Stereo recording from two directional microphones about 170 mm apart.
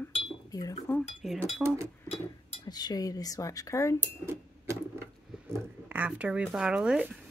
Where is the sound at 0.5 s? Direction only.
20° left (ahead or behind).